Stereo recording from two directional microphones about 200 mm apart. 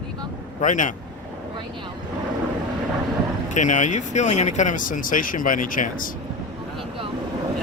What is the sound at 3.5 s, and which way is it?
Speech, 35° left (ahead or behind).